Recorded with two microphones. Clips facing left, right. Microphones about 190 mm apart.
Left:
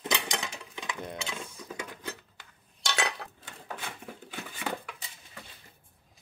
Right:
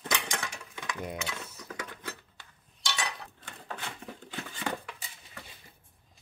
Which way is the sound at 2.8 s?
75° left (ahead or behind).